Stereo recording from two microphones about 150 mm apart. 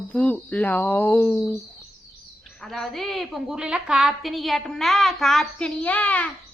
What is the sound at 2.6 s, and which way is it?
A woman's voice, centre (ahead or behind).